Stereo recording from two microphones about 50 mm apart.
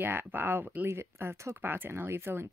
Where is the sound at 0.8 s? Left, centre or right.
Right.